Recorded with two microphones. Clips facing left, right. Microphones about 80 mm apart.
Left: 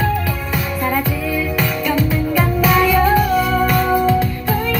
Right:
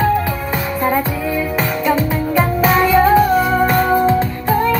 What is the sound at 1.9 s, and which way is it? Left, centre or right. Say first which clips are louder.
Music: right 2 dB; right.